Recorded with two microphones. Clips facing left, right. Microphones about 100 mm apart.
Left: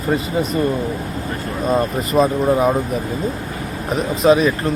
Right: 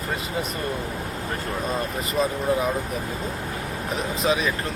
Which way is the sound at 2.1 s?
50° left (ahead or behind).